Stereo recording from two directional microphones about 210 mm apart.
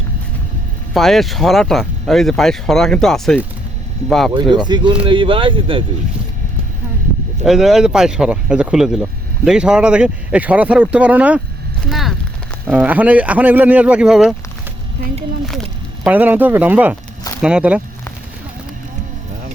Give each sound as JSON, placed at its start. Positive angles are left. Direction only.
{"t": 0.9, "sound": "speech", "side_deg": 0}
{"t": 4.5, "sound": "speech", "side_deg": -20}
{"t": 7.4, "sound": "speech", "side_deg": 0}
{"t": 11.9, "sound": "a sound", "side_deg": 0}
{"t": 12.6, "sound": "speech", "side_deg": -5}
{"t": 16.0, "sound": "speech", "side_deg": -10}